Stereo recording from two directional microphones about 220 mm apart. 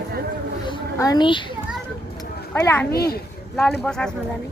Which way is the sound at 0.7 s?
15° left (ahead or behind).